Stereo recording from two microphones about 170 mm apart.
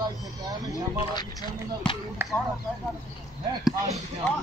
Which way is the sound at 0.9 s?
25° left (ahead or behind).